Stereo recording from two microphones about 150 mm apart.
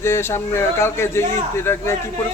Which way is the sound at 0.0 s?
15° left (ahead or behind).